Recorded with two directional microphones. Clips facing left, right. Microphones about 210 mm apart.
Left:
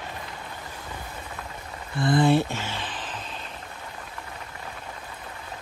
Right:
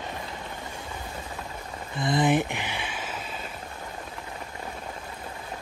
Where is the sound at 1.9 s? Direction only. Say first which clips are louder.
Left 3 dB; 20° right (ahead or behind).